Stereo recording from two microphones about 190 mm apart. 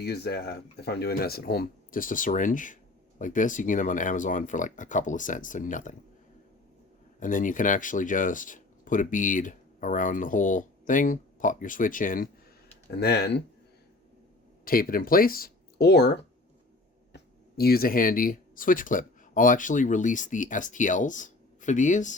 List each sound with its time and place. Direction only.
0.0 s speech: 55° left (ahead or behind)
7.2 s speech: 45° left (ahead or behind)
13.0 s speech: 60° left (ahead or behind)
14.6 s speech: 50° left (ahead or behind)
17.6 s speech: 50° left (ahead or behind)